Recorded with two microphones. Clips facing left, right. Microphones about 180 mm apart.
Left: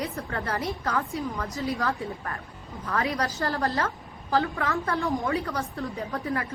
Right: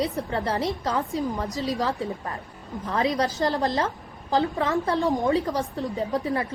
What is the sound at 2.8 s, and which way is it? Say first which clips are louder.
A woman's voice: right 4 dB; 20° right (ahead or behind).